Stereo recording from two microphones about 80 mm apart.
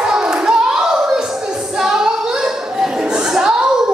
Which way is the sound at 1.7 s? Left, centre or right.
Centre.